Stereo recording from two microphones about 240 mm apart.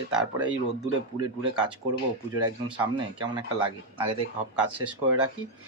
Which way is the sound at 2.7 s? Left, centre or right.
Centre.